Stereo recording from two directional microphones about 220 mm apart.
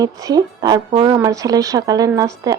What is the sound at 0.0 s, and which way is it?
A woman's voice, 15° right (ahead or behind).